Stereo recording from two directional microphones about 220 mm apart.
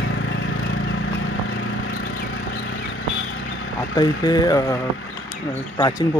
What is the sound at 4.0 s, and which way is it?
Speech, 20° left (ahead or behind).